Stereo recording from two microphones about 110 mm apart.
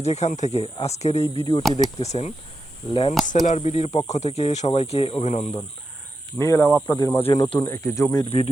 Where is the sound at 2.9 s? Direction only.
55° left (ahead or behind).